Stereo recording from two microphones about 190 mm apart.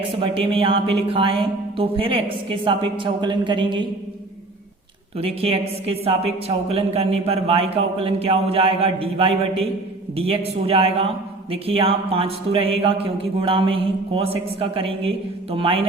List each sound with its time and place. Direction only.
0.2 s speech: 30° right (ahead or behind)
5.1 s a woman's voice: 30° right (ahead or behind)